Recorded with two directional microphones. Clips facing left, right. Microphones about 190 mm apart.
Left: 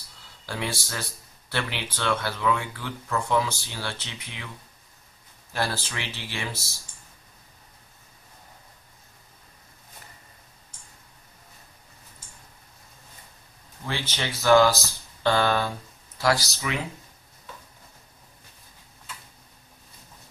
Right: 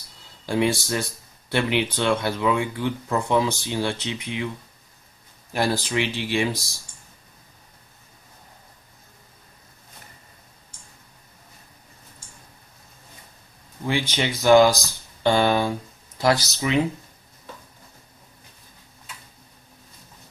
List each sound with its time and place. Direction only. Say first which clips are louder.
0.5 s speech: right 10 dB; 20° right (ahead or behind)
5.5 s speech: right 6 dB; 15° right (ahead or behind)
13.8 s speech: right 7 dB; 15° right (ahead or behind)